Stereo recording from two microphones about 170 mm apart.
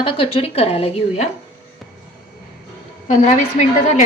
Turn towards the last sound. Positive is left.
turn(degrees=45)  # may be behind; listen again after turning